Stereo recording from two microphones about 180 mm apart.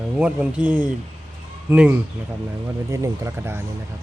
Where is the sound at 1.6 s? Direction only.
10° right (ahead or behind).